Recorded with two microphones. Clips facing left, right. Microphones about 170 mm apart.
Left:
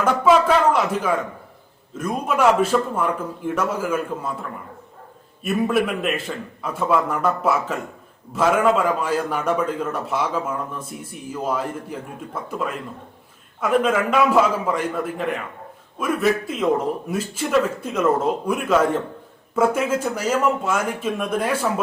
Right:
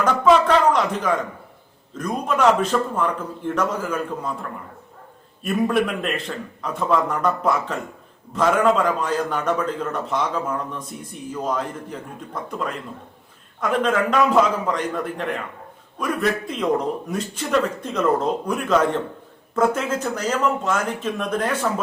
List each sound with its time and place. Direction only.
0.0 s a man's voice: 5° left (ahead or behind)
5.4 s a man's voice: 5° left (ahead or behind)